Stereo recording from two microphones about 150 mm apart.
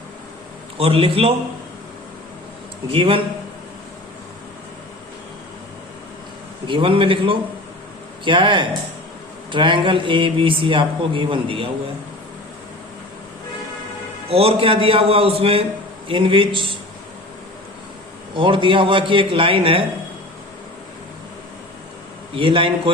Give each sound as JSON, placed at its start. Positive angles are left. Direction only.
{"t": 0.8, "sound": "speech", "side_deg": -40}
{"t": 2.9, "sound": "speech", "side_deg": -35}
{"t": 6.7, "sound": "speech", "side_deg": -35}
{"t": 14.3, "sound": "speech", "side_deg": -40}
{"t": 18.3, "sound": "speech", "side_deg": -35}
{"t": 22.4, "sound": "speech", "side_deg": -35}